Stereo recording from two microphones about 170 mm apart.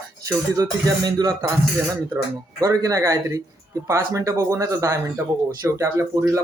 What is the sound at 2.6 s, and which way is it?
Speech, 20° right (ahead or behind).